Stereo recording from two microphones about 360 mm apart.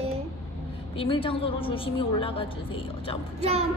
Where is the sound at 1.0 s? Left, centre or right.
Centre.